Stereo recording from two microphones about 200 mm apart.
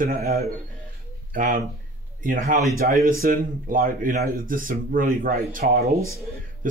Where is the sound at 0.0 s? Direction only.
50° right (ahead or behind).